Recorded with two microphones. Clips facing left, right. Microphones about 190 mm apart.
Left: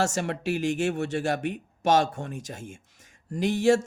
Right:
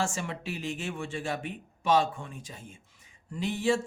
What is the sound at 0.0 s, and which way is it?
A man's voice, 75° left (ahead or behind).